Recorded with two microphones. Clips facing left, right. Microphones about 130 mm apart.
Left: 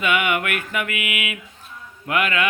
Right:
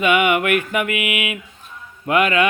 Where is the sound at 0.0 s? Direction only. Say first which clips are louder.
Right 5 dB; 20° right (ahead or behind).